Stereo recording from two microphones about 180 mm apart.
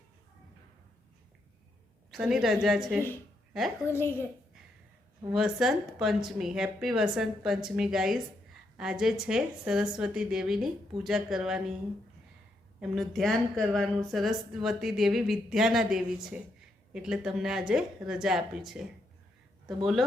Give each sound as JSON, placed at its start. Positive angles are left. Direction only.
{"t": 2.0, "sound": "a woman's voice", "side_deg": 0}
{"t": 3.8, "sound": "a woman's voice", "side_deg": 15}
{"t": 5.3, "sound": "a woman's voice", "side_deg": 0}
{"t": 12.8, "sound": "a woman's voice", "side_deg": 0}